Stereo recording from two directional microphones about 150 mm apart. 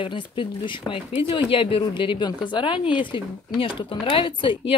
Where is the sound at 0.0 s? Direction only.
35° left (ahead or behind).